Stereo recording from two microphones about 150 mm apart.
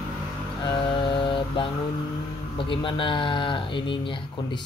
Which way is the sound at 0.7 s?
35° left (ahead or behind).